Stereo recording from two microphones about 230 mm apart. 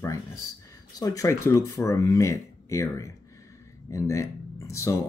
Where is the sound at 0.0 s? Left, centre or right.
Centre.